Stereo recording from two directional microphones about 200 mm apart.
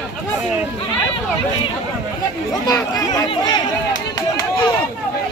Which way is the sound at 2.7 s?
20° left (ahead or behind).